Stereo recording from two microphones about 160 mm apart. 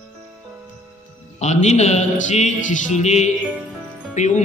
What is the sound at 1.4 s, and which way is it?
Music, 45° left (ahead or behind).